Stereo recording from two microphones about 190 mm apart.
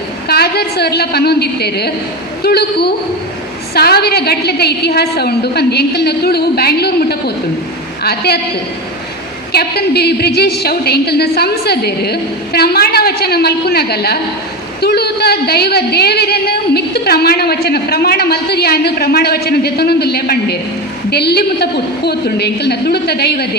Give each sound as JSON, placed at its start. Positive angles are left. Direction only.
{"t": 0.3, "sound": "a woman's voice", "side_deg": 55}
{"t": 9.5, "sound": "a woman's voice", "side_deg": 55}